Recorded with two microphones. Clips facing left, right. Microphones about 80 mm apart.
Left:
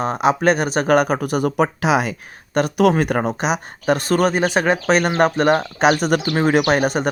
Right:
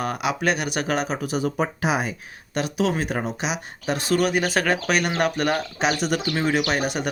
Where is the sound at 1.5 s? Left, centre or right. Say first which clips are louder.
Left 6 dB; left.